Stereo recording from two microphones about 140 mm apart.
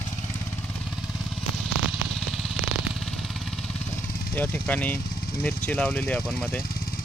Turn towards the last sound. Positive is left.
turn(degrees=5)  # may be behind; listen again after turning